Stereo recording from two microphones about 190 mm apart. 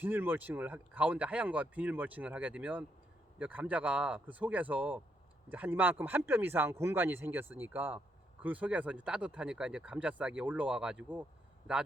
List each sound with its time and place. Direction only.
0.0 s speech: 10° right (ahead or behind)